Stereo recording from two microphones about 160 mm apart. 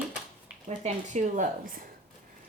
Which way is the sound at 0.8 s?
45° right (ahead or behind).